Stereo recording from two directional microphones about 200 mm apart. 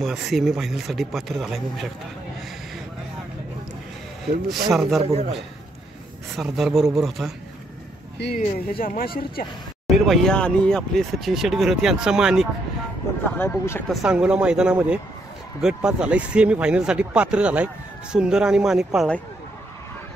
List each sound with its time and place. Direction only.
0.0 s speech: centre (ahead or behind)
4.6 s speech: centre (ahead or behind)
5.0 s a man's voice: 35° right (ahead or behind)
6.3 s speech: centre (ahead or behind)
8.4 s speech: 45° left (ahead or behind)
9.8 s speech: centre (ahead or behind)
13.4 s speech: 10° left (ahead or behind)
14.0 s speech: 5° right (ahead or behind)